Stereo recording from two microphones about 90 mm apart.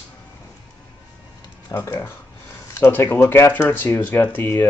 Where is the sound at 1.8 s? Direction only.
25° left (ahead or behind).